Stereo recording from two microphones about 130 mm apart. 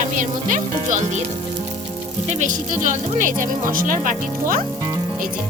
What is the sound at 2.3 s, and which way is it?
Speech, 70° right (ahead or behind).